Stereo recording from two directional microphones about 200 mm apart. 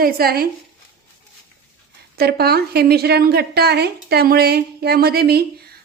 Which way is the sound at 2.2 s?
50° right (ahead or behind).